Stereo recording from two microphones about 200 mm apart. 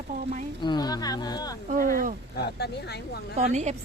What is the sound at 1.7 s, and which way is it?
Speech, 45° right (ahead or behind).